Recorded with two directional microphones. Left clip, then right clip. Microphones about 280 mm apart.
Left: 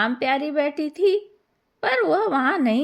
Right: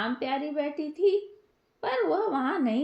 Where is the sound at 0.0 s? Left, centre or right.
Left.